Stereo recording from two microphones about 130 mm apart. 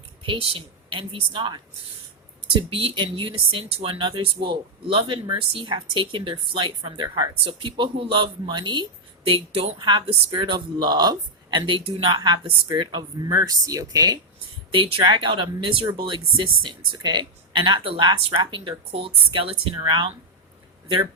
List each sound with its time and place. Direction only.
0.2 s speech: 45° right (ahead or behind)
9.7 s speech: 35° right (ahead or behind)
14.7 s speech: 45° right (ahead or behind)